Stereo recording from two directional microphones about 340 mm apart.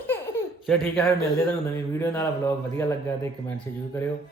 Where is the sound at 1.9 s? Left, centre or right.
Centre.